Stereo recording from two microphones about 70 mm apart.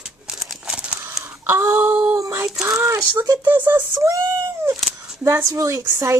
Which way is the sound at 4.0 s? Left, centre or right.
Right.